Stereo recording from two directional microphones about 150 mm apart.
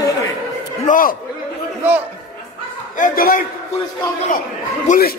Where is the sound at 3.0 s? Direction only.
70° left (ahead or behind).